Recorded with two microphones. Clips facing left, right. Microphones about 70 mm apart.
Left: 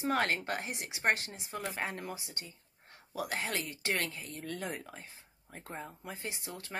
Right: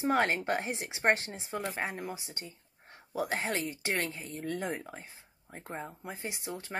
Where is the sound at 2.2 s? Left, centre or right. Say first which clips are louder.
Right 2 dB; right.